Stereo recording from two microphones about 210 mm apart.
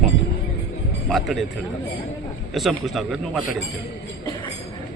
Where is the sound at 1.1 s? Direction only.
Centre (ahead or behind).